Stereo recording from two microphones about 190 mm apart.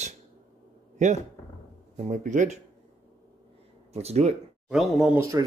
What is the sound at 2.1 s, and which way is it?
Speech, 40° right (ahead or behind).